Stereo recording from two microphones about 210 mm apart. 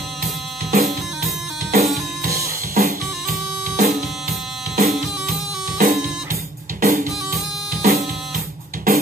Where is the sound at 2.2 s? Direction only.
45° right (ahead or behind).